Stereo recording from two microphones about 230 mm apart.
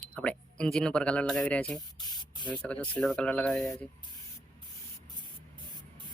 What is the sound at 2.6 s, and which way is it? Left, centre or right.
Speech, centre.